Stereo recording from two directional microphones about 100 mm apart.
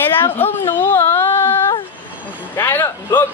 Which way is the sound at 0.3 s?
20° left (ahead or behind).